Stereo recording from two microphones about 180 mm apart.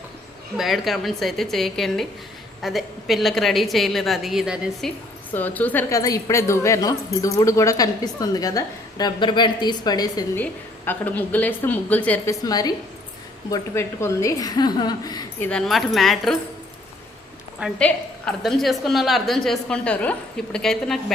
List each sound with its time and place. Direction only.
0.5 s a woman's voice: centre (ahead or behind)
5.3 s speech: 10° left (ahead or behind)
10.3 s a woman's voice: 10° left (ahead or behind)
15.4 s a woman's voice: 5° left (ahead or behind)
17.6 s a woman's voice: 5° left (ahead or behind)